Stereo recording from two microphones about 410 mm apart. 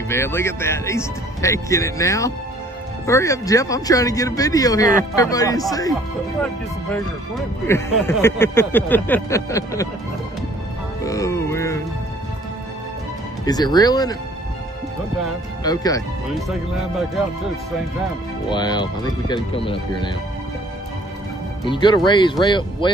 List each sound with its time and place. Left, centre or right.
0.1 s speech: centre
7.6 s a sound: centre
11.1 s music: centre
13.5 s speech: centre
15.6 s speech: centre
16.3 s a sound: centre
18.5 s speech: centre
21.6 s speech: centre